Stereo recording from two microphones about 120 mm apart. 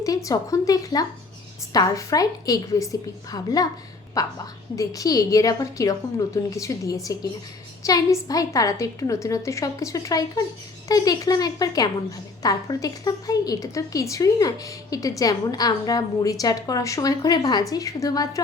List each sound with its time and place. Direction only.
0.0 s a woman's voice: 30° left (ahead or behind)